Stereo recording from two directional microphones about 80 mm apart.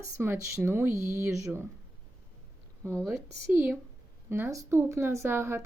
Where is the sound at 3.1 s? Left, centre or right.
Centre.